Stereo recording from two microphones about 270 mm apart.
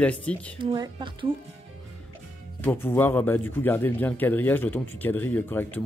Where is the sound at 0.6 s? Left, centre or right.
Centre.